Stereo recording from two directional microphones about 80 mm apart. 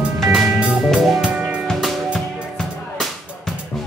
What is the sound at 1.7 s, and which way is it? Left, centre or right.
Music, centre.